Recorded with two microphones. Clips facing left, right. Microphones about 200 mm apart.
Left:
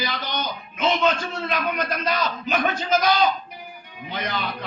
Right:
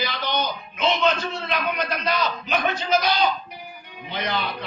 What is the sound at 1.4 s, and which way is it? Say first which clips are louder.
Speech: left 2 dB; 45° left (ahead or behind).